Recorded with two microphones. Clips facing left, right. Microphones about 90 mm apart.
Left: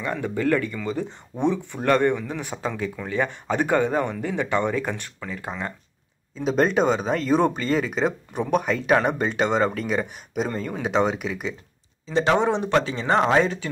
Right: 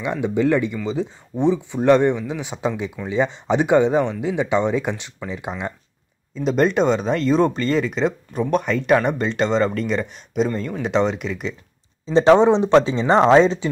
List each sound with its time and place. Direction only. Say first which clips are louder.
0.0 s speech: right 5 dB; 15° right (ahead or behind)
1.3 s speech: right 3 dB; centre (ahead or behind)
1.7 s speech: right 5 dB; 15° right (ahead or behind)
6.3 s speech: right 2 dB; centre (ahead or behind)
12.1 s speech: right 7 dB; 30° right (ahead or behind)